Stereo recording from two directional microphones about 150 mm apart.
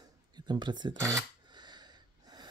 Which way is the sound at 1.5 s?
30° right (ahead or behind).